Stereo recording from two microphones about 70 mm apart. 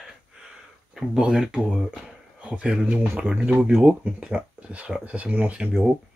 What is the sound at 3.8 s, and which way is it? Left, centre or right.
Speech, centre.